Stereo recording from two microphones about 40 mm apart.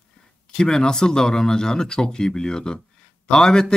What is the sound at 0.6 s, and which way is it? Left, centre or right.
A man's voice, centre.